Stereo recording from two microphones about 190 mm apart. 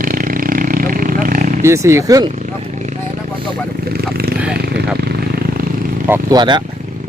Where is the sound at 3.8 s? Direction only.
55° right (ahead or behind).